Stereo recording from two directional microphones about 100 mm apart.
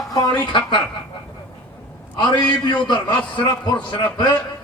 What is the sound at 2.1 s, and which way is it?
A man's voice, 50° left (ahead or behind).